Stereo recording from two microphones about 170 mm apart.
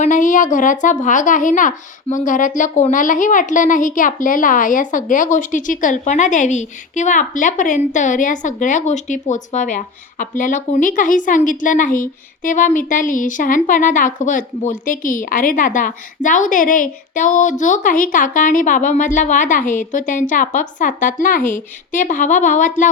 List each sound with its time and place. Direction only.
0.0 s speech: 50° left (ahead or behind)